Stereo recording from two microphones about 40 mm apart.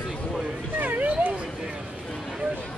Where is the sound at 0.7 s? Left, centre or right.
Right.